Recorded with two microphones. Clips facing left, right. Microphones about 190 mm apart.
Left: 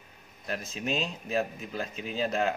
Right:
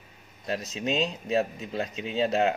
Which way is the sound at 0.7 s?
25° right (ahead or behind).